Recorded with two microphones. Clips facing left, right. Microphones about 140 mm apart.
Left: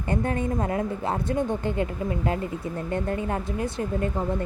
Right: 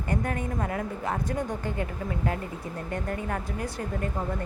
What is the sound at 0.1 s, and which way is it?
A woman's voice, 25° left (ahead or behind).